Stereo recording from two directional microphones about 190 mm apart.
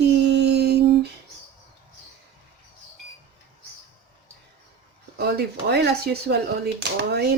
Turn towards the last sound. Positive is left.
turn(degrees=-60)  # may be behind; listen again after turning